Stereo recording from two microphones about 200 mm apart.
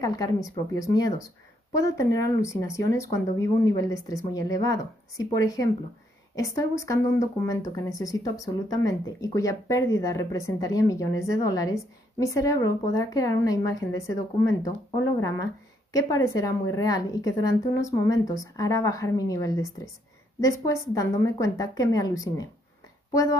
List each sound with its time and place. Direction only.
0.0 s speech: 15° left (ahead or behind)
15.9 s speech: 15° left (ahead or behind)